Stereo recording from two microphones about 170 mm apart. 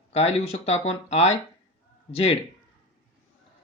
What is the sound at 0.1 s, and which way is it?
Speech, 40° left (ahead or behind).